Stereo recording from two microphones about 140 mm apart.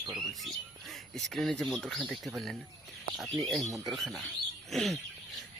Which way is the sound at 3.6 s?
25° right (ahead or behind).